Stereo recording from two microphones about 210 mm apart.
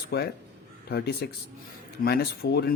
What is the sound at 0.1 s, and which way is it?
Speech, 50° left (ahead or behind).